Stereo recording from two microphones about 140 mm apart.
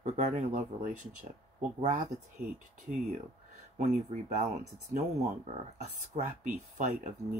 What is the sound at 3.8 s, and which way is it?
Speech, 55° right (ahead or behind).